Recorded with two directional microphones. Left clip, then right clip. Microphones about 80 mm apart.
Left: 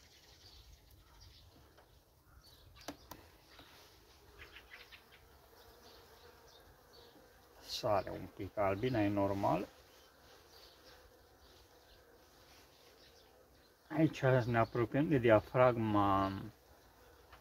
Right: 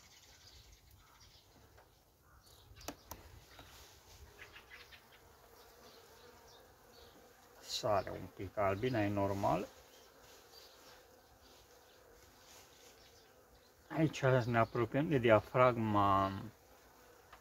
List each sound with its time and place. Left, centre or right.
7.6 s a sound: left
8.4 s speech: left
13.8 s speech: centre